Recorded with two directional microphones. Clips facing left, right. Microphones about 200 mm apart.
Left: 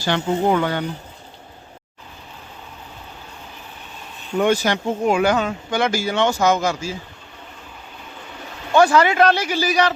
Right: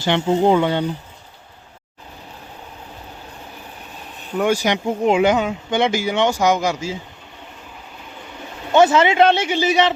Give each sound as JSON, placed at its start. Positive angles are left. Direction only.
{"t": 0.0, "sound": "a man's voice", "side_deg": -25}
{"t": 4.4, "sound": "speech", "side_deg": -10}
{"t": 8.7, "sound": "a man's voice", "side_deg": -20}